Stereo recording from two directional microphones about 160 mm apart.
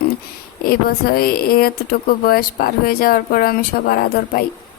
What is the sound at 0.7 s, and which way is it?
Speech, 70° left (ahead or behind).